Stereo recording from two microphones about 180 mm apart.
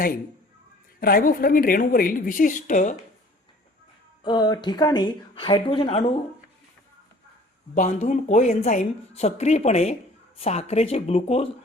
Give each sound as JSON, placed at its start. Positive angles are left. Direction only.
{"t": 0.9, "sound": "a woman's voice", "side_deg": 55}
{"t": 4.2, "sound": "speech", "side_deg": 25}
{"t": 7.8, "sound": "speech", "side_deg": 45}